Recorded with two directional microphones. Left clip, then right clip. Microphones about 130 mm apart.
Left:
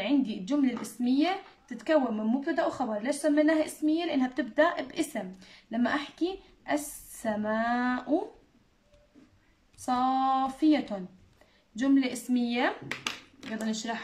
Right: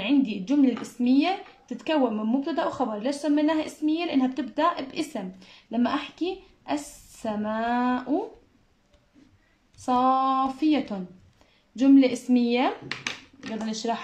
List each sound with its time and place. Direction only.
0.0 s a woman's voice: 15° right (ahead or behind)
9.8 s a woman's voice: 10° right (ahead or behind)
11.8 s a woman's voice: 20° right (ahead or behind)